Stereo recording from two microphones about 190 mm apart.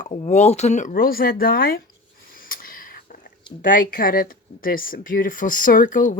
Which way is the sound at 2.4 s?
45° left (ahead or behind).